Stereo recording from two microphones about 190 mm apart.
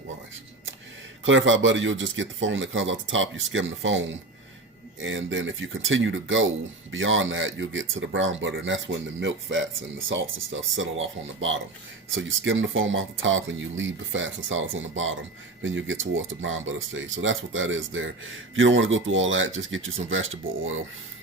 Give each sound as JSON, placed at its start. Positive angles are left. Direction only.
{"t": 1.2, "sound": "speech", "side_deg": -85}
{"t": 10.1, "sound": "speech", "side_deg": -90}